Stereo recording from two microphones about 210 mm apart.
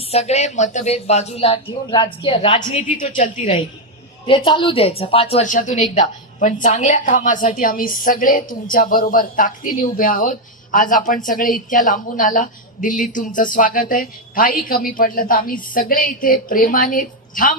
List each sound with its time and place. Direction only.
0.0 s a woman's voice: 30° left (ahead or behind)